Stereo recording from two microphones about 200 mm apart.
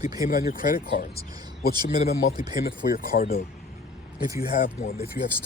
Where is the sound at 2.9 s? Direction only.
50° left (ahead or behind).